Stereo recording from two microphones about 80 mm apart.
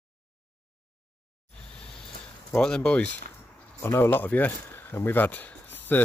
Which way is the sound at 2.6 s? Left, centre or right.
Centre.